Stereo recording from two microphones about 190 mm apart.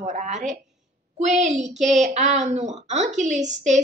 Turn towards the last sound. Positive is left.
turn(degrees=-40)  # may be behind; listen again after turning